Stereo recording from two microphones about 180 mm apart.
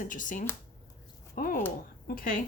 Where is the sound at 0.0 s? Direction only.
45° left (ahead or behind).